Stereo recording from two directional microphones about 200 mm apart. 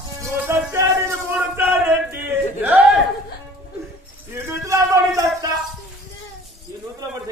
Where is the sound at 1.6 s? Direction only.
10° right (ahead or behind).